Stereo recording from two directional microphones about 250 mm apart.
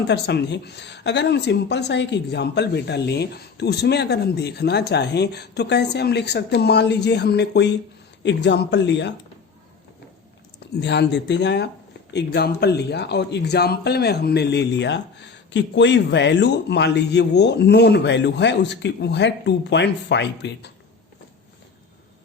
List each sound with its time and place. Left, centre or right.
0.1 s a woman's voice: left
10.6 s speech: left